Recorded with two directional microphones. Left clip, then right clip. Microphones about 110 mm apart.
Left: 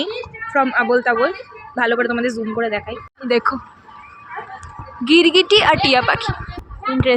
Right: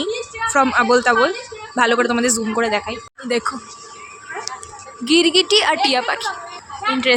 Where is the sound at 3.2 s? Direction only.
20° left (ahead or behind).